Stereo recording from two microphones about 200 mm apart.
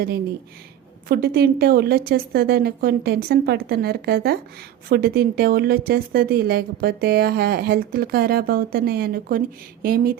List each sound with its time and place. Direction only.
1.0 s a woman's voice: 50° right (ahead or behind)